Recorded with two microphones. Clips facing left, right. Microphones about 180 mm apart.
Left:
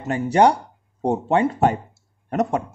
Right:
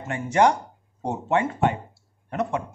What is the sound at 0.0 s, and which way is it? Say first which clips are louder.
Speech: left 4 dB; 35° left (ahead or behind).